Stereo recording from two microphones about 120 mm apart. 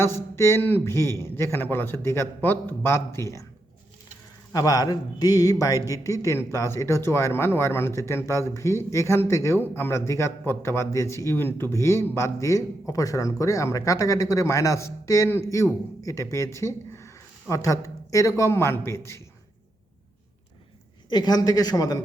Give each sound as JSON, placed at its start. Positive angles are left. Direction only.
{"t": 0.0, "sound": "speech", "side_deg": 20}
{"t": 4.5, "sound": "a man's voice", "side_deg": 30}
{"t": 21.1, "sound": "a man's voice", "side_deg": 35}